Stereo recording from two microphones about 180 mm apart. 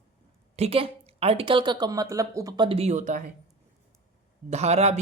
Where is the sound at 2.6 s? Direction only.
35° right (ahead or behind).